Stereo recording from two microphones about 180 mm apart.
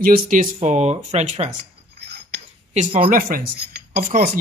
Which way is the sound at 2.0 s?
70° right (ahead or behind).